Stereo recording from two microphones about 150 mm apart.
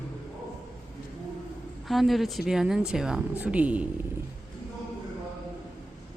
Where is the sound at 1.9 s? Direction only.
Centre (ahead or behind).